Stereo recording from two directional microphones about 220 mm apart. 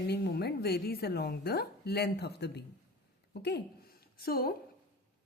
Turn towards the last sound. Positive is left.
turn(degrees=45)  # may be behind; listen again after turning